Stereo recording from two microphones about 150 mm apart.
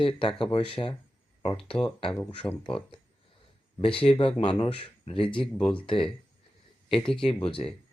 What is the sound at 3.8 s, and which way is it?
Speech, 35° left (ahead or behind).